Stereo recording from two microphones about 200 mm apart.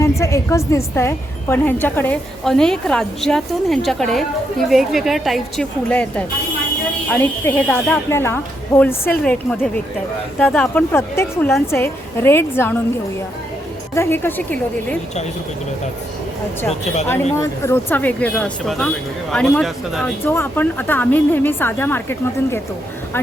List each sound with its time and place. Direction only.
0.2 s a woman's voice: 15° left (ahead or behind)
13.9 s a woman's voice: 10° left (ahead or behind)
16.8 s speech: 35° left (ahead or behind)
17.4 s a woman's voice: 15° left (ahead or behind)